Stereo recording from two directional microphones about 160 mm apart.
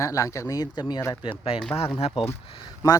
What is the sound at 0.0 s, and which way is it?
Speech, 20° left (ahead or behind).